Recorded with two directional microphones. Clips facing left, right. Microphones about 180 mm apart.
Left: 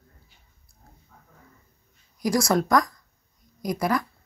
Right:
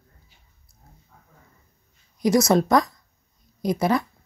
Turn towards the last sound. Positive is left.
turn(degrees=-25)  # may be behind; listen again after turning